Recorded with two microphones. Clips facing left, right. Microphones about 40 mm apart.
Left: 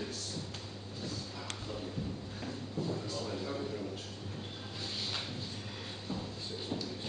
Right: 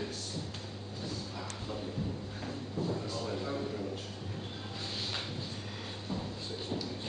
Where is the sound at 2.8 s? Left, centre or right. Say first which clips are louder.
Right 2 dB; centre.